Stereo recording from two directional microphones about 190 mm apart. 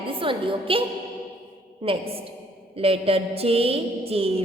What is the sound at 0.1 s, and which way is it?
Speech, 25° right (ahead or behind).